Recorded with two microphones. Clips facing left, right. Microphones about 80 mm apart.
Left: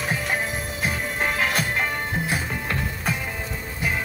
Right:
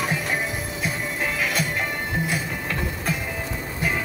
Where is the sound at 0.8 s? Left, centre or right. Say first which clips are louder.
Left 2 dB; left.